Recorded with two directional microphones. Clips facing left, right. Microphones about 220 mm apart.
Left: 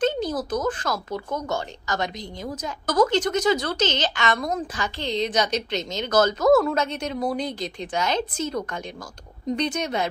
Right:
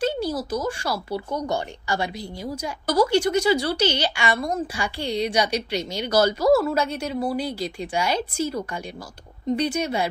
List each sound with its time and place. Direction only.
0.0 s speech: 10° right (ahead or behind)